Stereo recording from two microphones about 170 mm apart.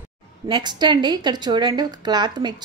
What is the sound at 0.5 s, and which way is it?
A woman's voice, 25° right (ahead or behind).